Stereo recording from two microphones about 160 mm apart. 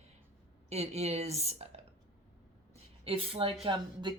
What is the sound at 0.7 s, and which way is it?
A woman's voice, 40° right (ahead or behind).